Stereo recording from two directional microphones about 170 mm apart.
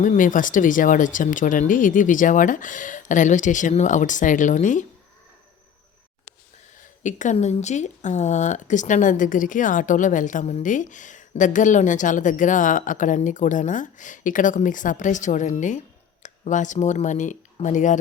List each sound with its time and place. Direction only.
0.0 s speech: 50° left (ahead or behind)
6.7 s speech: 45° left (ahead or behind)